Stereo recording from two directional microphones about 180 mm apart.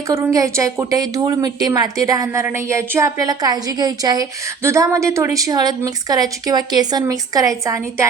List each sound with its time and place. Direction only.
0.1 s a woman's voice: 15° right (ahead or behind)